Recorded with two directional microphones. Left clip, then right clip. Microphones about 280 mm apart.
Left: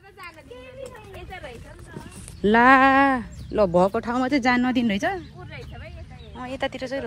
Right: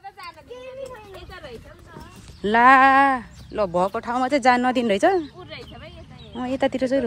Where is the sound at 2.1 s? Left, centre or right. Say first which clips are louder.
Even; centre.